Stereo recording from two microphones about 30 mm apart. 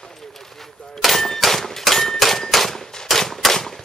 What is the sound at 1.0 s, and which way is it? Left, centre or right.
Speech, centre.